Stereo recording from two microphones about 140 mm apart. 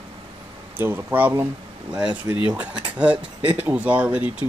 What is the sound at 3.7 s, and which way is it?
Speech, 10° right (ahead or behind).